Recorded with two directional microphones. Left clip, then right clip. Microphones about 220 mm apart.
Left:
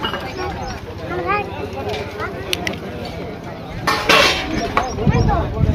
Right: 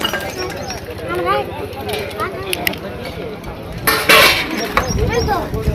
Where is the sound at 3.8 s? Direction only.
45° right (ahead or behind).